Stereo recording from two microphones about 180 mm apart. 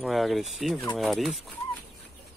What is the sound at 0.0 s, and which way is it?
Speech, centre (ahead or behind).